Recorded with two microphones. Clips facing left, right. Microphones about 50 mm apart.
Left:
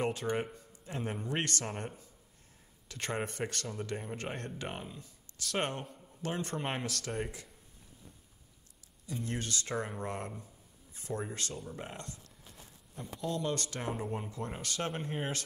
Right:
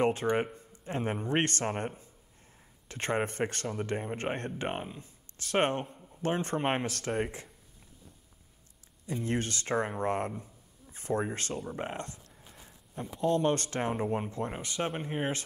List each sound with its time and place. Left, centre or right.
0.0 s speech: right
5.9 s a sound: centre
6.2 s speech: right
9.0 s speech: right
13.2 s speech: right
14.5 s speech: right